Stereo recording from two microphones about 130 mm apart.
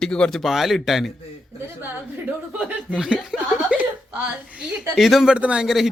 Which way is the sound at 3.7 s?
10° right (ahead or behind).